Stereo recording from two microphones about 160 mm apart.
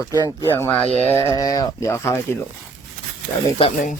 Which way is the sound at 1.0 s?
15° left (ahead or behind).